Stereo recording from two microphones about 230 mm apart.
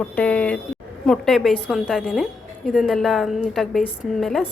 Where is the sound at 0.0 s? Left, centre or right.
Centre.